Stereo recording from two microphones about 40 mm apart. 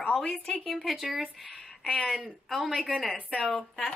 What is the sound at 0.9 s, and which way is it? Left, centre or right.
Speech, centre.